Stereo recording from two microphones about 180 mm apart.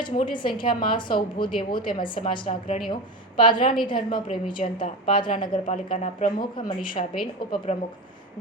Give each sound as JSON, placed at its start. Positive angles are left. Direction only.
{"t": 0.0, "sound": "a woman's voice", "side_deg": 25}
{"t": 7.7, "sound": "speech", "side_deg": 40}